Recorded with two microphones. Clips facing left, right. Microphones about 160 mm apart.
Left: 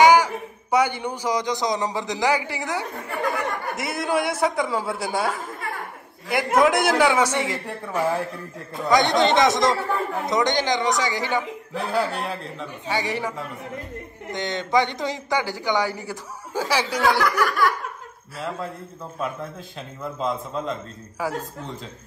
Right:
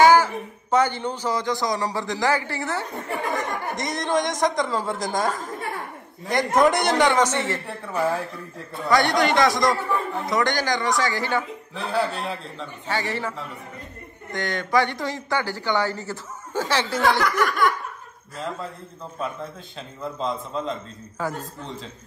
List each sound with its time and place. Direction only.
0.0 s speech: 15° left (ahead or behind)
7.6 s a man's voice: centre (ahead or behind)
8.8 s speech: 20° left (ahead or behind)
11.9 s a man's voice: 5° left (ahead or behind)
12.8 s speech: 15° left (ahead or behind)
14.3 s speech: 20° left (ahead or behind)
20.2 s a man's voice: centre (ahead or behind)